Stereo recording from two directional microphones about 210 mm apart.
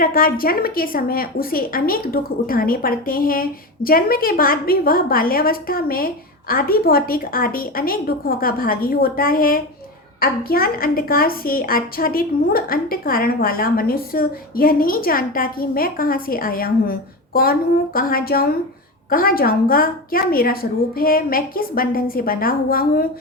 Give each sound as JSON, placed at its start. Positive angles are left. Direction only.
{"t": 0.0, "sound": "a woman's voice", "side_deg": 45}